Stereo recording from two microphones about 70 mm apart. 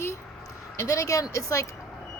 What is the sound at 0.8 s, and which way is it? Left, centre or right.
Speech, left.